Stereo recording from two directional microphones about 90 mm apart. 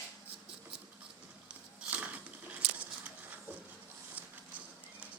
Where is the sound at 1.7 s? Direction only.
15° right (ahead or behind).